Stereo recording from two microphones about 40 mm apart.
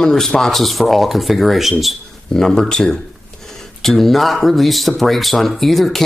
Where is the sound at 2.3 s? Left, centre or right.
Centre.